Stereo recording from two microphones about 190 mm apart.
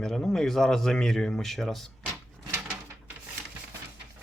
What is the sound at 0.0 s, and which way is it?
Speech, centre (ahead or behind).